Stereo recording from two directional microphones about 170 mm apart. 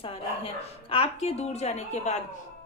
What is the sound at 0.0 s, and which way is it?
A woman's voice, 35° left (ahead or behind).